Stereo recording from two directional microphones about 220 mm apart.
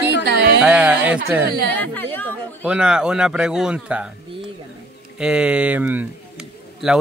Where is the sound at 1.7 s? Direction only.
10° left (ahead or behind).